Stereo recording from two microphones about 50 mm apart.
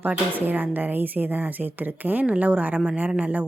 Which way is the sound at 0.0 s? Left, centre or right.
Right.